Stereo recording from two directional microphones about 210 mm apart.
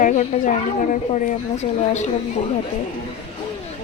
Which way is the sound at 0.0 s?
35° left (ahead or behind).